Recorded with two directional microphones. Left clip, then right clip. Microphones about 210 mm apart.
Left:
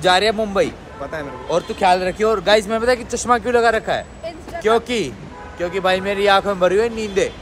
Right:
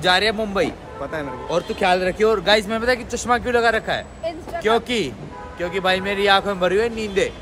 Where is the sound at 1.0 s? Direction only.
20° right (ahead or behind).